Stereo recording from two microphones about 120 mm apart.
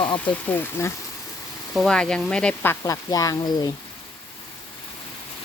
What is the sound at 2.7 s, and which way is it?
A woman's voice, 30° left (ahead or behind).